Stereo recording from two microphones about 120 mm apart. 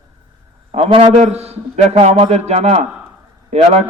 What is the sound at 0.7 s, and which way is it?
A man's voice, 60° right (ahead or behind).